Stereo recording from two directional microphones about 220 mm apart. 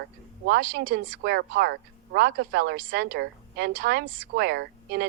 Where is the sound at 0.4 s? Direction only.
45° right (ahead or behind).